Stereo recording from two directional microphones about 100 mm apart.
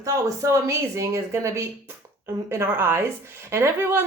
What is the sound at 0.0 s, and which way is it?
A woman's voice, 30° right (ahead or behind).